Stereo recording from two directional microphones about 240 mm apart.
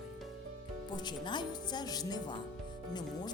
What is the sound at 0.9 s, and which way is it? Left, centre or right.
Speech, centre.